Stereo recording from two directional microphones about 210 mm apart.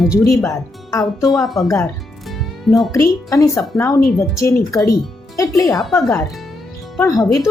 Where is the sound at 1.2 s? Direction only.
Centre (ahead or behind).